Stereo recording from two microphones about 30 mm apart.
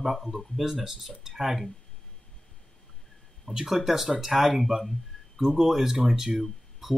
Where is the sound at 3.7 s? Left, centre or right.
Centre.